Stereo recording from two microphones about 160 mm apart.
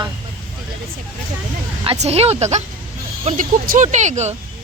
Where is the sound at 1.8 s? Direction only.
35° right (ahead or behind).